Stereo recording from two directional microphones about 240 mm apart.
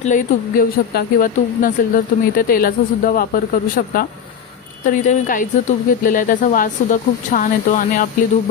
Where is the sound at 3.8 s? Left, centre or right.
Left.